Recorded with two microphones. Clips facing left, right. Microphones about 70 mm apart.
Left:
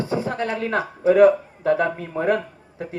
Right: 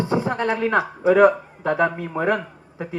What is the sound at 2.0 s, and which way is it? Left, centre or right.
Speech, right.